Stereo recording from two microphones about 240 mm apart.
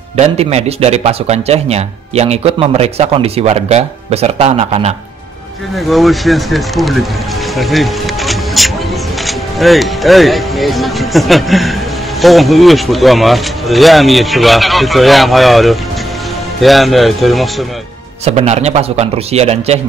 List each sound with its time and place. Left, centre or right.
0.2 s speech: right
5.9 s speech: centre
18.2 s speech: right